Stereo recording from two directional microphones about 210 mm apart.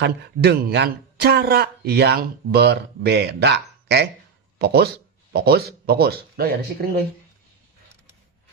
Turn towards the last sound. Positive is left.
turn(degrees=-45)  # may be behind; listen again after turning